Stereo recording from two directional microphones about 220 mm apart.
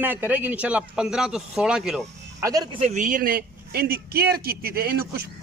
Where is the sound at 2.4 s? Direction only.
15° right (ahead or behind); by 5.3 s 45° right (ahead or behind).